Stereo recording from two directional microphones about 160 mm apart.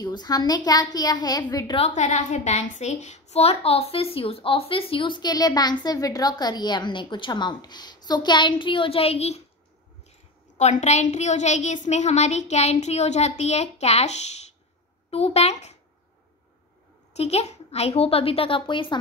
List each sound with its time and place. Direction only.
0.0 s a woman's voice: 25° left (ahead or behind)
1.8 s a woman's voice: 45° left (ahead or behind)
10.6 s a woman's voice: 45° left (ahead or behind)
17.2 s a woman's voice: 40° left (ahead or behind)